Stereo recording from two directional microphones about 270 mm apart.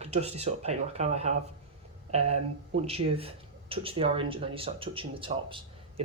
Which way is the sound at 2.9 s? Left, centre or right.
Right.